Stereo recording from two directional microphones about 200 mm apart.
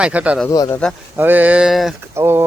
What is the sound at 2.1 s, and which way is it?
Speech, 15° right (ahead or behind).